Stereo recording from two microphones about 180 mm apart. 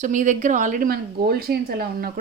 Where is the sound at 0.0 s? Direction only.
45° right (ahead or behind).